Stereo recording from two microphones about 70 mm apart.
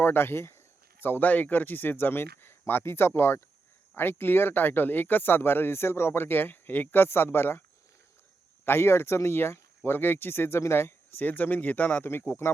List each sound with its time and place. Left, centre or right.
0.0 s speech: left
8.6 s speech: left